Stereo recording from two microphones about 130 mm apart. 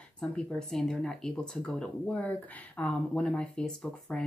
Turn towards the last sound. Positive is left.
turn(degrees=5)  # may be behind; listen again after turning